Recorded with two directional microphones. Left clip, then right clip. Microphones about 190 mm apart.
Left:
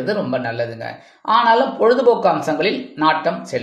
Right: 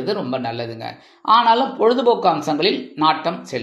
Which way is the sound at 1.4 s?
25° right (ahead or behind).